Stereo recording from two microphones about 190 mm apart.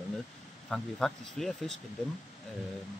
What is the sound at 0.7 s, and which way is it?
Speech, centre (ahead or behind).